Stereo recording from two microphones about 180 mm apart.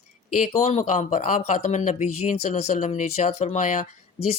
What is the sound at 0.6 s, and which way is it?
Speech, 40° left (ahead or behind).